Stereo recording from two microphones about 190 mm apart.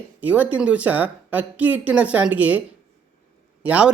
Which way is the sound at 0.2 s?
10° right (ahead or behind).